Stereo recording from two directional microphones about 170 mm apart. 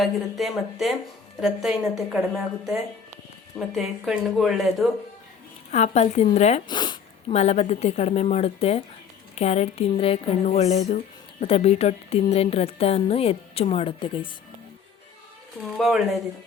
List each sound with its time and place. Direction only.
0.0 s a woman's voice: centre (ahead or behind)
3.8 s a woman's voice: centre (ahead or behind)
5.7 s speech: 40° left (ahead or behind)
6.7 s speech: 25° left (ahead or behind)
15.8 s a woman's voice: centre (ahead or behind)